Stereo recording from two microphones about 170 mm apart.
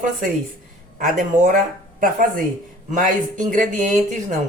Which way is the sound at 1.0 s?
50° right (ahead or behind).